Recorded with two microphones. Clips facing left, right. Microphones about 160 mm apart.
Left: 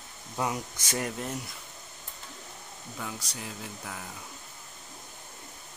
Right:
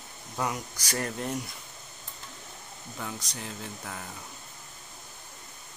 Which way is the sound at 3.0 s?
5° left (ahead or behind).